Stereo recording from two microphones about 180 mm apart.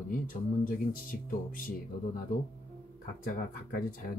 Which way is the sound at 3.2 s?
50° left (ahead or behind).